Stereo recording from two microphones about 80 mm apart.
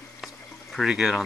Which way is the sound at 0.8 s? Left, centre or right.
Centre.